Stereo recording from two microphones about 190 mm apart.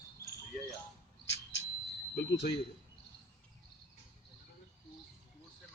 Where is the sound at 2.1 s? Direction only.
65° left (ahead or behind).